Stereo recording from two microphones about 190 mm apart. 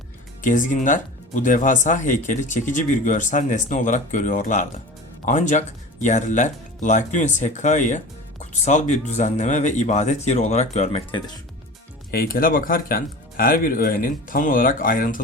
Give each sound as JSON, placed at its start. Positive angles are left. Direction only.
{"t": 0.4, "sound": "speech", "side_deg": 40}
{"t": 12.1, "sound": "speech", "side_deg": 50}